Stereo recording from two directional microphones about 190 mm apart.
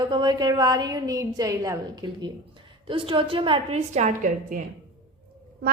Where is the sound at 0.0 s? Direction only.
25° right (ahead or behind); by 4.6 s 45° right (ahead or behind).